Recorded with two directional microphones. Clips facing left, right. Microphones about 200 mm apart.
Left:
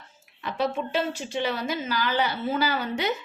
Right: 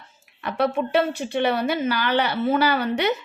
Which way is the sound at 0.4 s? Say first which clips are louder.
Right 5 dB; 60° right (ahead or behind).